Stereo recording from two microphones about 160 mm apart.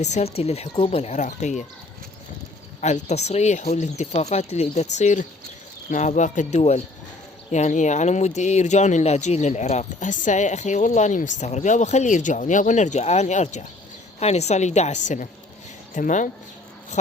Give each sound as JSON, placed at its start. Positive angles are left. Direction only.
{"t": 0.0, "sound": "speech", "side_deg": 45}
{"t": 2.8, "sound": "speech", "side_deg": 45}